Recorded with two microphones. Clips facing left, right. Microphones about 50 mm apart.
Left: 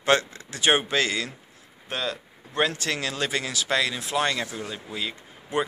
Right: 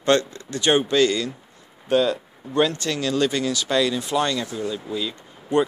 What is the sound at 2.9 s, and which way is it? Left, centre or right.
Speech, left.